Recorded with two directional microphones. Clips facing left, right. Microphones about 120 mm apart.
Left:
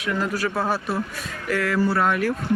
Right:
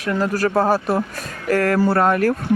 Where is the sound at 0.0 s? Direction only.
40° right (ahead or behind).